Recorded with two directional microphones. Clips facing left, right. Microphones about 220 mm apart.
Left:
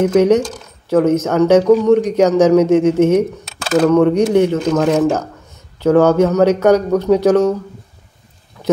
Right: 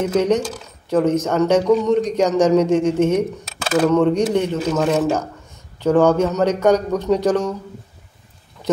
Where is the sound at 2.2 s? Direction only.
5° left (ahead or behind).